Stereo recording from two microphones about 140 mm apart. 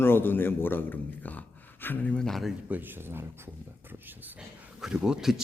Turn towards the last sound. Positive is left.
turn(degrees=-5)  # may be behind; listen again after turning